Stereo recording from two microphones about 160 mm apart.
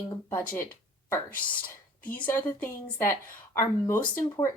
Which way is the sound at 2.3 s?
10° left (ahead or behind).